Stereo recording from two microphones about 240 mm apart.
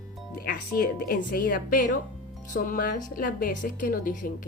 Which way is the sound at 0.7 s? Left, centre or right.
Left.